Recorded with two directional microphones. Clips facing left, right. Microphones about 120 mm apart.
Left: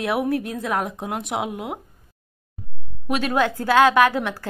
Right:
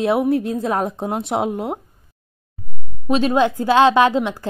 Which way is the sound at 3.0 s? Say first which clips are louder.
Right 5 dB; 25° right (ahead or behind).